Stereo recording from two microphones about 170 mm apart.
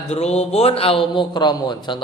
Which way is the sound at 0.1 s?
40° left (ahead or behind).